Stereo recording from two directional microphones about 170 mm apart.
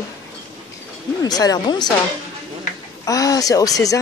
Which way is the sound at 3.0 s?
20° left (ahead or behind).